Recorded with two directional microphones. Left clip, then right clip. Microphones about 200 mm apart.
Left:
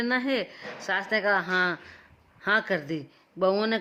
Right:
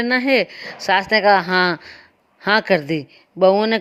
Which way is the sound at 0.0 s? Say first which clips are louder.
Right 10 dB; 25° right (ahead or behind).